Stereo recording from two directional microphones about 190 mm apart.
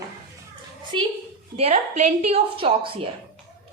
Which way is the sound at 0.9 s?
25° right (ahead or behind).